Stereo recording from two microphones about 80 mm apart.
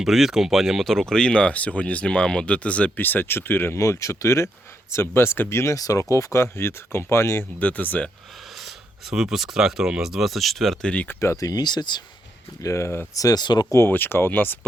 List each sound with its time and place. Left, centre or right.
0.0 s speech: centre
1.1 s speech: centre; by 3.8 s left
3.8 s speech: left
7.6 s speech: left
8.6 s speech: centre
11.2 s speech: left
12.6 s speech: left
13.1 s speech: left
13.4 s speech: left
13.7 s speech: left